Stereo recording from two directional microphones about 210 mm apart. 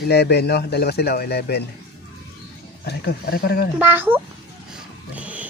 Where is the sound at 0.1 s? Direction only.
50° left (ahead or behind).